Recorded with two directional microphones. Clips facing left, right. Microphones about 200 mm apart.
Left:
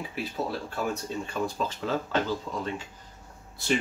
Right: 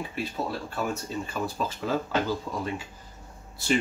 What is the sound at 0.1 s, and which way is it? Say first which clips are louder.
Speech: even; centre (ahead or behind).